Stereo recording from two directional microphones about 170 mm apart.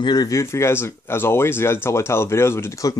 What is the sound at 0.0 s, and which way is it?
Speech, 25° left (ahead or behind).